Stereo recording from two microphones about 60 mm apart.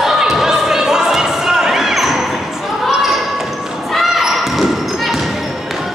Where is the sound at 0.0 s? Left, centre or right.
Centre.